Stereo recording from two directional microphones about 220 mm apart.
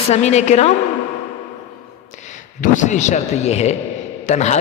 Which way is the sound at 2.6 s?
35° left (ahead or behind).